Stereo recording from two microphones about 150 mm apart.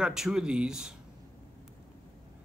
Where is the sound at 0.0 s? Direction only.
5° right (ahead or behind).